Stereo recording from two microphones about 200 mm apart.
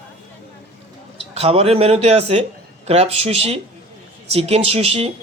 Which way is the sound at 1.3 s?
30° right (ahead or behind).